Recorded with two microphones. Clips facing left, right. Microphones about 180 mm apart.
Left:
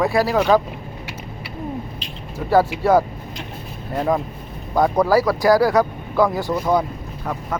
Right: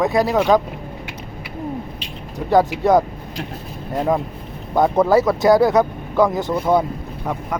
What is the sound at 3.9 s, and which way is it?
Speech, 5° right (ahead or behind).